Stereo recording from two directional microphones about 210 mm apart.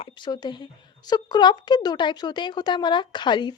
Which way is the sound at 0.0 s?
20° left (ahead or behind).